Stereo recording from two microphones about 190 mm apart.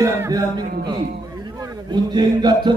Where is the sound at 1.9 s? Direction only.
20° right (ahead or behind).